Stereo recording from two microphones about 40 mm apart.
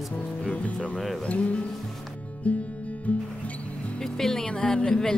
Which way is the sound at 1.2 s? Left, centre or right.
Left.